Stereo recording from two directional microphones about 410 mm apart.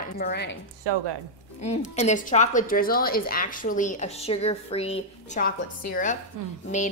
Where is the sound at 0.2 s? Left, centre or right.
Left.